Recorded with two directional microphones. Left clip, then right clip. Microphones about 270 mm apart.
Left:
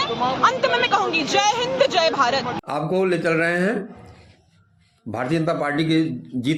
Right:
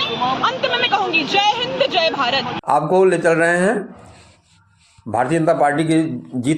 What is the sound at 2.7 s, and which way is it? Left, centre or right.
Speech, centre.